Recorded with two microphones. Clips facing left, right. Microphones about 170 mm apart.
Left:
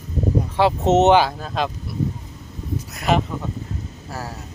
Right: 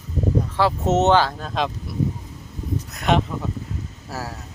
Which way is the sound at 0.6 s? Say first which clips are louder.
Left 4 dB; 20° left (ahead or behind).